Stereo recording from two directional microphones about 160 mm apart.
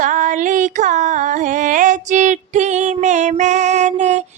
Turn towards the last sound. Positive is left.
turn(degrees=-45)  # may be behind; listen again after turning